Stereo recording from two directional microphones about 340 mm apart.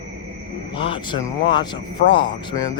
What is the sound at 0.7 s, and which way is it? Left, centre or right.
Speech, centre.